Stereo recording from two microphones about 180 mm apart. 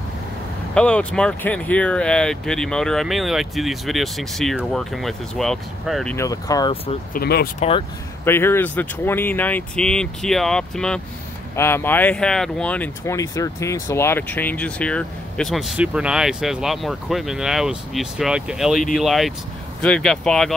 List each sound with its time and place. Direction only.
0.7 s speech: 5° left (ahead or behind)
6.1 s speech: 20° left (ahead or behind)
7.2 s speech: 65° left (ahead or behind)
8.3 s speech: 15° left (ahead or behind)